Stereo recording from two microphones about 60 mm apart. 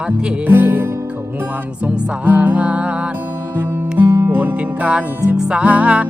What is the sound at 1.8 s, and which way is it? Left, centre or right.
Music, right.